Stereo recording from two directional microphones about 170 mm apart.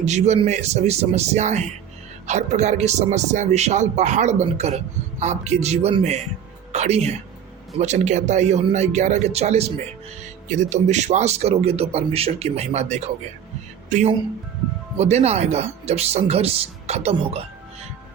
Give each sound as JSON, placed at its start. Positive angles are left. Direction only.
{"t": 0.0, "sound": "a man's voice", "side_deg": -40}